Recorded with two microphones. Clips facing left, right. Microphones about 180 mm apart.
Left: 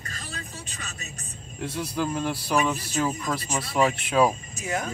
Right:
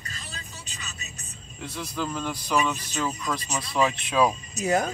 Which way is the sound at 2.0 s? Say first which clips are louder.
Left 3 dB; 5° left (ahead or behind).